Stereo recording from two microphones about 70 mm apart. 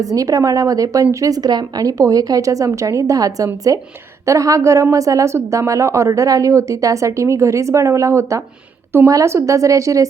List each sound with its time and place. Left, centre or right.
0.0 s a woman's voice: right